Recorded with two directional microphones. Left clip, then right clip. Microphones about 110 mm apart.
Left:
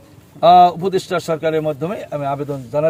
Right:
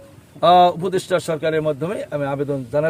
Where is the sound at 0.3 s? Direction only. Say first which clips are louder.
Left 3 dB; 35° right (ahead or behind).